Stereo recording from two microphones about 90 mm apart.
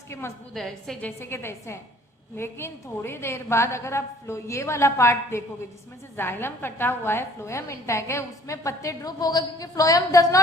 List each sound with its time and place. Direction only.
0.1 s a woman's voice: 30° left (ahead or behind)
0.5 s a woman's voice: 5° left (ahead or behind)
1.0 s a woman's voice: 25° left (ahead or behind)